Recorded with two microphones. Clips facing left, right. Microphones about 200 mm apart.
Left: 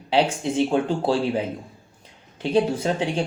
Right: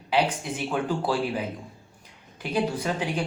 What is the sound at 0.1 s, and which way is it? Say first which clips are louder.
Speech: left 4 dB; 25° left (ahead or behind).